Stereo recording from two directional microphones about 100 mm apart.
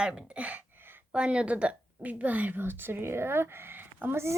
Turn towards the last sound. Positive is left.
turn(degrees=-25)  # may be behind; listen again after turning